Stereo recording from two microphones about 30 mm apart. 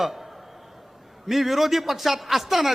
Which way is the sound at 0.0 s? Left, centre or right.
Centre.